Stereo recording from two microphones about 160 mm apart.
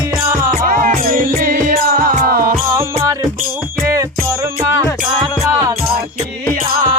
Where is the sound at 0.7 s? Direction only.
60° right (ahead or behind).